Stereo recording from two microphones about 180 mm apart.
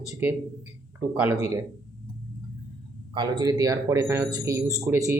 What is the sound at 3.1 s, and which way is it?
Speech, 20° right (ahead or behind).